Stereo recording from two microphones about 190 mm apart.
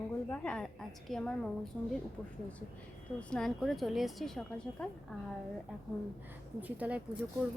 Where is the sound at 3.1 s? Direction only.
5° left (ahead or behind).